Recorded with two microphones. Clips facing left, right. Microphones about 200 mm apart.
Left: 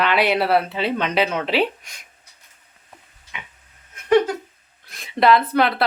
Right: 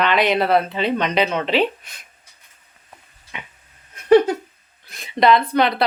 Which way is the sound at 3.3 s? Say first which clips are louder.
Right 2 dB; 35° right (ahead or behind).